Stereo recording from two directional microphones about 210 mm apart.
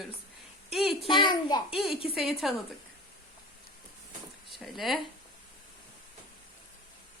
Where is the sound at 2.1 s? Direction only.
Centre (ahead or behind).